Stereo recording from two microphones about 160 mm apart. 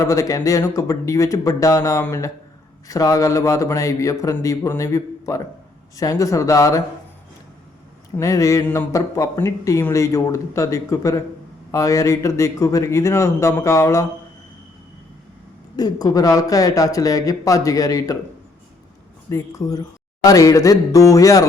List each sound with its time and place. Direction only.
0.0 s speech: 20° left (ahead or behind)
8.1 s speech: 20° left (ahead or behind)
15.7 s speech: 25° left (ahead or behind)
19.3 s speech: 20° left (ahead or behind)